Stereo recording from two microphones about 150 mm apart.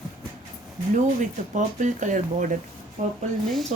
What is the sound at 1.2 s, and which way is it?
Speech, 55° right (ahead or behind).